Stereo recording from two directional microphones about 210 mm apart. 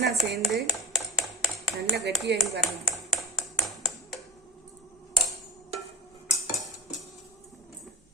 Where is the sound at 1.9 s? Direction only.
50° right (ahead or behind).